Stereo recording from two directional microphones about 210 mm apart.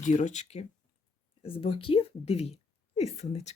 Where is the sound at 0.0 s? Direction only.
35° left (ahead or behind).